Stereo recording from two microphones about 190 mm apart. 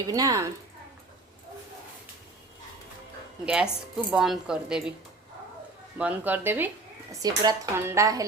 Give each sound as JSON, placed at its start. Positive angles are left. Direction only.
{"t": 0.1, "sound": "speech", "side_deg": -20}
{"t": 3.4, "sound": "speech", "side_deg": -5}
{"t": 6.0, "sound": "speech", "side_deg": -10}